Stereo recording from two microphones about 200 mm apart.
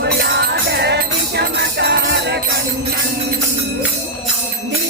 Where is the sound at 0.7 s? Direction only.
55° right (ahead or behind).